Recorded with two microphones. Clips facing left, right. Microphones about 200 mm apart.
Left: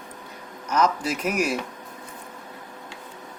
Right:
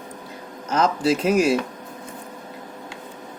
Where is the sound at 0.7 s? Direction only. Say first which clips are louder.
Right 3 dB; 30° right (ahead or behind).